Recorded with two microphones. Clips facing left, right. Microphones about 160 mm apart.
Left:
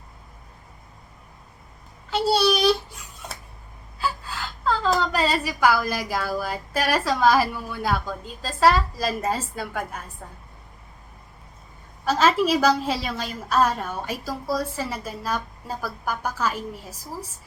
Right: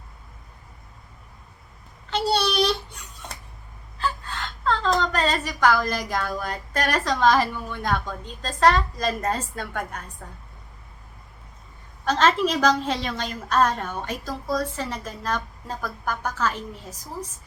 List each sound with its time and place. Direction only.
2.0 s a sound: 5° left (ahead or behind)
3.9 s a woman's voice: 5° left (ahead or behind)
12.0 s a woman's voice: 10° left (ahead or behind)